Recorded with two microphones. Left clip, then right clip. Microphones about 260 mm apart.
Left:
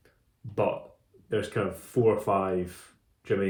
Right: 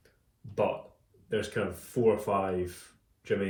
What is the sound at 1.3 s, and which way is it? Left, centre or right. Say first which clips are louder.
Speech: left 2 dB; left.